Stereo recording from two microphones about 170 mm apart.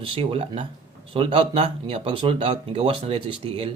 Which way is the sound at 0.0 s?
30° right (ahead or behind).